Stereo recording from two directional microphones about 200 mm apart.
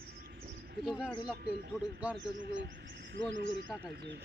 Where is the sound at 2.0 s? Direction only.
5° right (ahead or behind).